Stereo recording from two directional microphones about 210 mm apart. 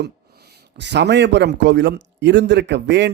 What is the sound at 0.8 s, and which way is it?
A man's voice, 55° right (ahead or behind).